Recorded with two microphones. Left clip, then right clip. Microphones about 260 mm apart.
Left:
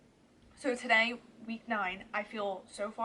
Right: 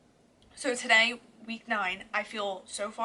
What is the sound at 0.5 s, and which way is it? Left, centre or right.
A woman's voice, centre.